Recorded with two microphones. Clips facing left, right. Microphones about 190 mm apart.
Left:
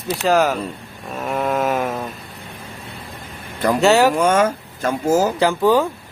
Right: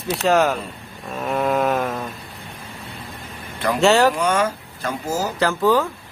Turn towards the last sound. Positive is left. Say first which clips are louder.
# left 2 dB
turn(degrees=15)  # may be behind; listen again after turning